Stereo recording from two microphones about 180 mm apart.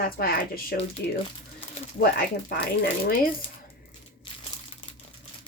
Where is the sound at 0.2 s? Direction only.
55° left (ahead or behind).